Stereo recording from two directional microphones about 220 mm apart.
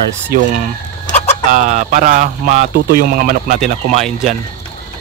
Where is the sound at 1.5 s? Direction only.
35° right (ahead or behind).